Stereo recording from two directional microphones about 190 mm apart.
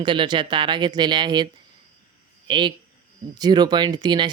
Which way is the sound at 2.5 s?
25° right (ahead or behind).